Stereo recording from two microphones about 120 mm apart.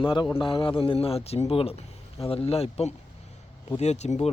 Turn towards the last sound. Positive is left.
turn(degrees=70)  # may be behind; listen again after turning